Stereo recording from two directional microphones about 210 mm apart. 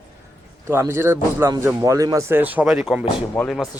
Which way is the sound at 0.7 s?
10° right (ahead or behind).